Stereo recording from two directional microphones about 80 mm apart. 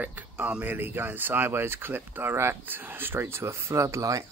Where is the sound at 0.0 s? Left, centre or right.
Right.